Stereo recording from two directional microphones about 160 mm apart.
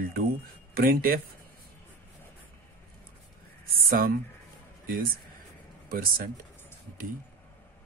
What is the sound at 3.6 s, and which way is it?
Speech, 65° right (ahead or behind).